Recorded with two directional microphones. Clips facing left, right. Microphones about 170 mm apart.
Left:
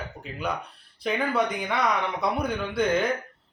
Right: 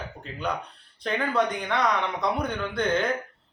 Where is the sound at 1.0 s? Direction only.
5° left (ahead or behind).